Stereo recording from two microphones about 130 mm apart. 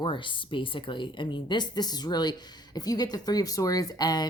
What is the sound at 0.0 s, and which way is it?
Speech, 40° left (ahead or behind).